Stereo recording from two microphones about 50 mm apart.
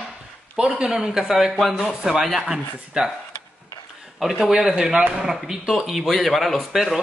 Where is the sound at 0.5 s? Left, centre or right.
Centre.